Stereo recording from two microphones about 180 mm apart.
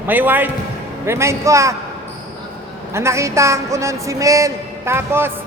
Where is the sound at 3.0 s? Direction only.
15° right (ahead or behind).